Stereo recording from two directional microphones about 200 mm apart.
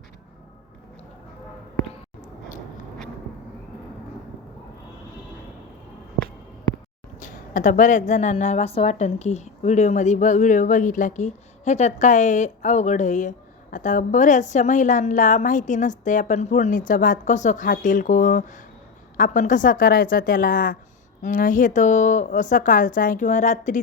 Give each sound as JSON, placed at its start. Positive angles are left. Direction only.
{"t": 7.2, "sound": "a woman's voice", "side_deg": 40}